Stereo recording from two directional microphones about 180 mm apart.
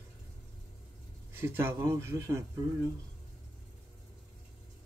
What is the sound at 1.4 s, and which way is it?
A man's voice, 15° right (ahead or behind).